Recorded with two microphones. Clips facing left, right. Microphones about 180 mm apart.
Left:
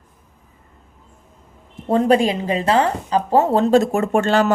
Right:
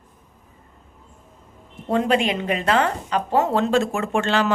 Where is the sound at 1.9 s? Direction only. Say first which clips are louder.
Left 4 dB; 35° left (ahead or behind).